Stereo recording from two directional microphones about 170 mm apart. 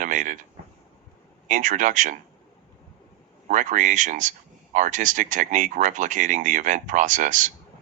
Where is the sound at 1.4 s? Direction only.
50° right (ahead or behind).